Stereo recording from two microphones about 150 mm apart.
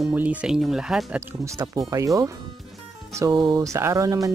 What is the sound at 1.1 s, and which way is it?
Speech, 20° right (ahead or behind).